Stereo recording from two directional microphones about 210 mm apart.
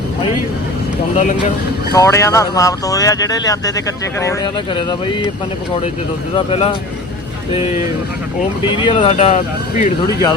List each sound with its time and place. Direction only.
1.1 s speech: 35° left (ahead or behind)
2.0 s speech: 15° left (ahead or behind)
6.3 s speech: 25° left (ahead or behind)
9.0 s speech: 30° left (ahead or behind)